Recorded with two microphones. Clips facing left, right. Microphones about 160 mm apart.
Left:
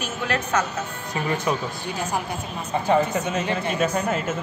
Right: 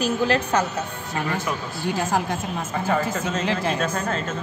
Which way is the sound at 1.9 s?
90° right.